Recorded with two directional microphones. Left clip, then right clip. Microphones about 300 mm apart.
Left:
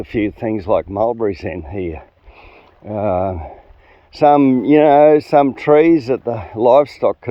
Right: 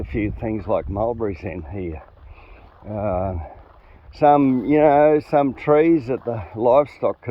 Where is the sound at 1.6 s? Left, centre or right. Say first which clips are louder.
Left 6 dB; centre.